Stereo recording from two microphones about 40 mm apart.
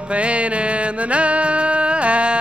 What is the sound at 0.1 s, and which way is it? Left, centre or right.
Music, right.